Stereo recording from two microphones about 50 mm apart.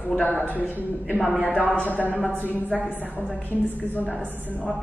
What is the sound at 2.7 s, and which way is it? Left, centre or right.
Speech, centre.